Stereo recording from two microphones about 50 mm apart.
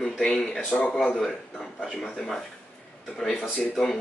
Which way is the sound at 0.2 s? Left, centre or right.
Centre.